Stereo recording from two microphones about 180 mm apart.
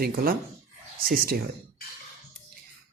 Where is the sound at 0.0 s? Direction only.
55° right (ahead or behind).